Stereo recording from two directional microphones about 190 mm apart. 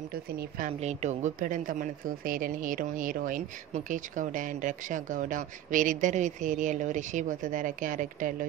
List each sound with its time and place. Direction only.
0.1 s speech: 50° right (ahead or behind)
0.7 s speech: 35° right (ahead or behind)